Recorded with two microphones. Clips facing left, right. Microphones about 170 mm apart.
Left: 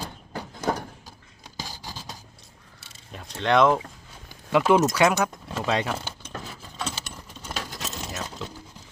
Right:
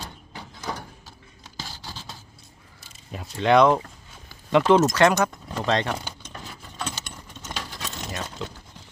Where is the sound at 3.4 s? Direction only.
Centre (ahead or behind).